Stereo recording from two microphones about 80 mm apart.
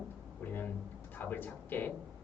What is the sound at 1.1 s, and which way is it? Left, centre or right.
Speech, left.